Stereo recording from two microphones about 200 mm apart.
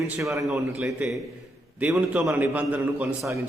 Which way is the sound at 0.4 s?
Centre (ahead or behind).